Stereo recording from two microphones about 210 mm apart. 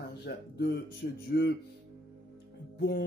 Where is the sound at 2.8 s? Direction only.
55° left (ahead or behind).